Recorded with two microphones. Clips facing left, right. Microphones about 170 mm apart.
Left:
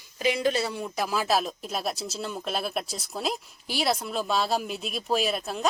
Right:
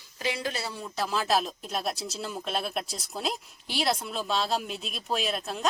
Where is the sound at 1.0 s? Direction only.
5° left (ahead or behind).